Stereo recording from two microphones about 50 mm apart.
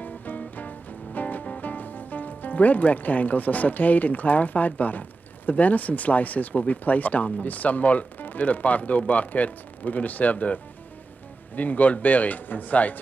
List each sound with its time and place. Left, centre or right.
0.0 s music: left
5.5 s speech: left